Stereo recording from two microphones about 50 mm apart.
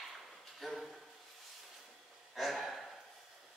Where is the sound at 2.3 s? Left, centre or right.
Centre.